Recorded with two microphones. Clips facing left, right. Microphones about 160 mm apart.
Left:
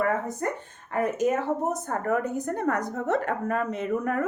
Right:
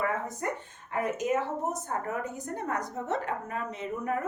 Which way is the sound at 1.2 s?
55° left (ahead or behind).